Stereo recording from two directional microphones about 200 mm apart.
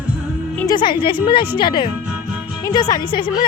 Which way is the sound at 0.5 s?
15° left (ahead or behind).